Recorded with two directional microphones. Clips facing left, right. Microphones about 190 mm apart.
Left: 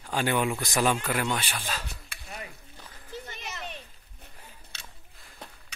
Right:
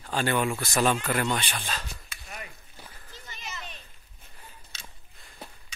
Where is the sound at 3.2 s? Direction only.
60° left (ahead or behind).